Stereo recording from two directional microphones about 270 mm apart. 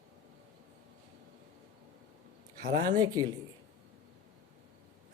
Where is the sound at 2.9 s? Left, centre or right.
Centre.